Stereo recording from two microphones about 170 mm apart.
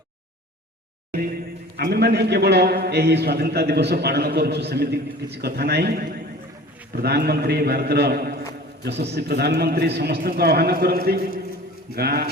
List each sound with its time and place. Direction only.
1.7 s a man's voice: 75° right (ahead or behind)
8.8 s a man's voice: 80° right; by 12.3 s 65° right (ahead or behind)